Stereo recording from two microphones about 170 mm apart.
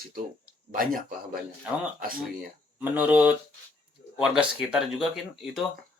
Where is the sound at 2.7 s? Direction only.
10° right (ahead or behind).